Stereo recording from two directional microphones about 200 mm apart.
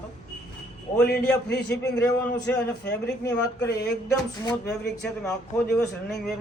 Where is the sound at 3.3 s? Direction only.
60° left (ahead or behind).